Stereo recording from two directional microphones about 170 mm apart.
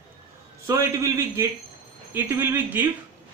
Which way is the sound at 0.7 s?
20° right (ahead or behind).